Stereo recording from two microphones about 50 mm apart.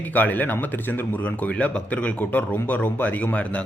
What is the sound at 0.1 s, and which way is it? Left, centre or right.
Speech, left.